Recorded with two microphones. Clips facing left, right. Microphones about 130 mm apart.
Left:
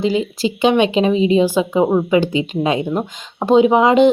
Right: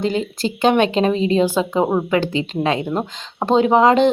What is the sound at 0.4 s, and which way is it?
Speech, 5° left (ahead or behind).